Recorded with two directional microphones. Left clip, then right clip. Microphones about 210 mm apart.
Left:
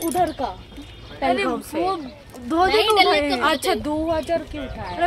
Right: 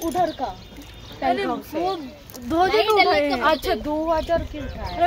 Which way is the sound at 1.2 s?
5° left (ahead or behind).